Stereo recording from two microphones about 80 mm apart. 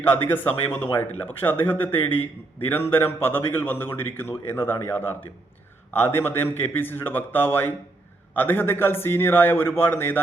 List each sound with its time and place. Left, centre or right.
0.3 s a man's voice: left